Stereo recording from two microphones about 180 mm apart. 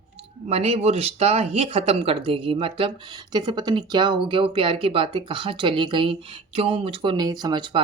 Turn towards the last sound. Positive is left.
turn(degrees=-25)  # may be behind; listen again after turning